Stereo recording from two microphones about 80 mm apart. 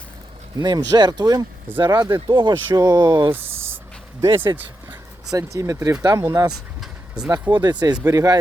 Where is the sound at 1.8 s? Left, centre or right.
Right.